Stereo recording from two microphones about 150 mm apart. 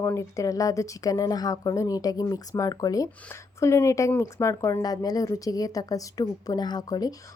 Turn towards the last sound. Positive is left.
turn(degrees=25)  # may be behind; listen again after turning